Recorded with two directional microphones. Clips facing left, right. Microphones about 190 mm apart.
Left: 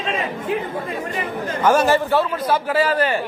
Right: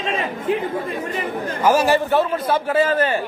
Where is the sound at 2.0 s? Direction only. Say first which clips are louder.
Even; 25° right (ahead or behind).